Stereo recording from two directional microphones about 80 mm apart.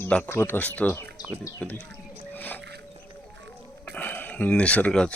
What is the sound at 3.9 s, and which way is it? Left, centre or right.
Speech, left.